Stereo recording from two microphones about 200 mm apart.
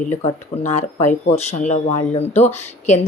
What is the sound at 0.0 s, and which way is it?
A woman's voice, 35° left (ahead or behind).